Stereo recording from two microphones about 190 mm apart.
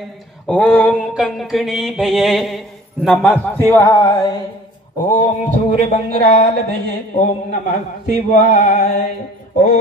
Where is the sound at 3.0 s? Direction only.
10° left (ahead or behind).